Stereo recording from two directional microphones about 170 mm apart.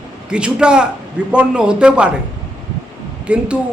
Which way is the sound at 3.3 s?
5° right (ahead or behind).